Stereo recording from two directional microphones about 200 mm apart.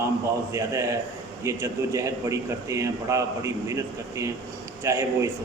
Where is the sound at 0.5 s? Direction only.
15° right (ahead or behind).